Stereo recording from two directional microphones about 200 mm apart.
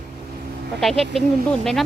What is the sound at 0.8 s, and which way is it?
Speech, centre (ahead or behind).